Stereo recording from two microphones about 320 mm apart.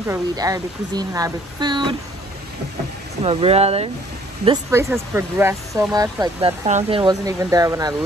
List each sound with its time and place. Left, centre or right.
0.1 s speech: centre
3.3 s speech: centre